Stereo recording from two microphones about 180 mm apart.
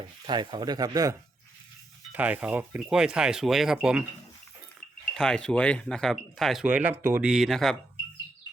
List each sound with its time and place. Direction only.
0.3 s speech: 25° right (ahead or behind)
2.1 s speech: 10° right (ahead or behind)
5.1 s speech: 5° left (ahead or behind)